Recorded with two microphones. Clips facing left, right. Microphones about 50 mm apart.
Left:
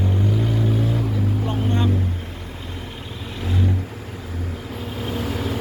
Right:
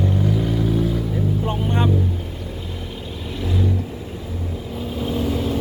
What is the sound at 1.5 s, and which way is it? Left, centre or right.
Vehicle, right.